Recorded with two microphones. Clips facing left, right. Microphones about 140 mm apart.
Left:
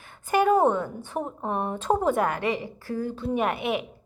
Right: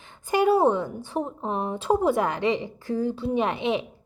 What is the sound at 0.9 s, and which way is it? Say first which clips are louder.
A woman's voice: right 2 dB; 15° right (ahead or behind).